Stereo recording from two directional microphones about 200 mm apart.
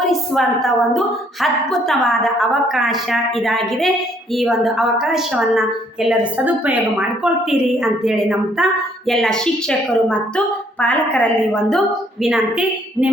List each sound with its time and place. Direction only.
0.0 s a woman's voice: centre (ahead or behind)